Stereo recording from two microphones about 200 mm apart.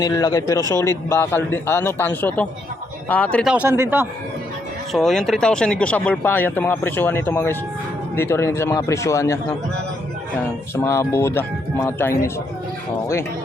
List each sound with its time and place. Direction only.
0.0 s speech: 20° left (ahead or behind)
3.5 s speech: 10° right (ahead or behind)
4.9 s speech: centre (ahead or behind)
10.8 s speech: 15° left (ahead or behind)